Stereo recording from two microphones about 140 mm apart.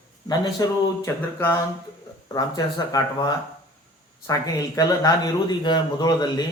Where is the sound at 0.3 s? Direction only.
30° left (ahead or behind).